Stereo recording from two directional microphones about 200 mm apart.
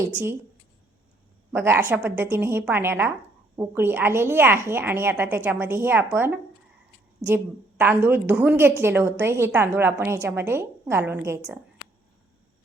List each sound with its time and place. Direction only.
0.1 s a woman's voice: 10° right (ahead or behind)
1.5 s a woman's voice: 10° right (ahead or behind)